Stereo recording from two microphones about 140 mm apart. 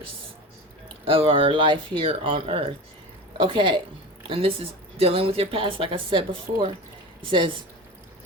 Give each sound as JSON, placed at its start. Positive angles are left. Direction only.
{"t": 1.0, "sound": "a woman's voice", "side_deg": -40}